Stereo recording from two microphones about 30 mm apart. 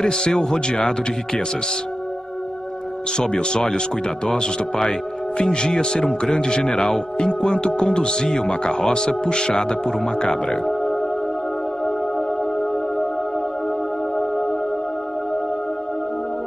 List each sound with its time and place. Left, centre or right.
0.0 s speech: left
3.2 s speech: left
5.4 s speech: left
9.8 s speech: centre
14.1 s music: centre